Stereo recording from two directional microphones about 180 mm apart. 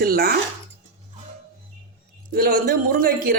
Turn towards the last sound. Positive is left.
turn(degrees=-50)  # may be behind; listen again after turning